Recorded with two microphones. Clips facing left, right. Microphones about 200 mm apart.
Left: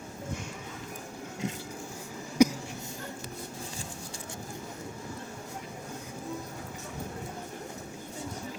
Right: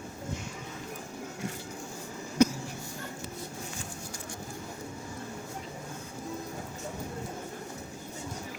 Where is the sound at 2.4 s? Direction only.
15° left (ahead or behind).